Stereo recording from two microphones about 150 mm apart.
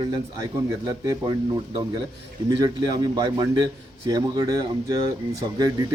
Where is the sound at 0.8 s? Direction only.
25° right (ahead or behind).